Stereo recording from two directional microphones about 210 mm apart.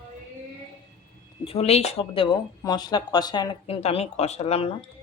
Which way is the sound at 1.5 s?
30° left (ahead or behind).